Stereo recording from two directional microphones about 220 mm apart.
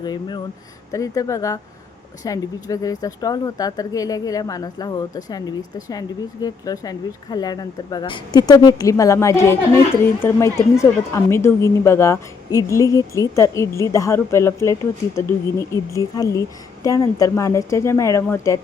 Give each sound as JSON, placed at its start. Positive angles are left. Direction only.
{"t": 0.0, "sound": "speech", "side_deg": 20}